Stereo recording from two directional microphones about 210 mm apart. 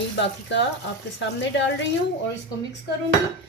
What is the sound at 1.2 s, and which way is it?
Speech, 60° left (ahead or behind).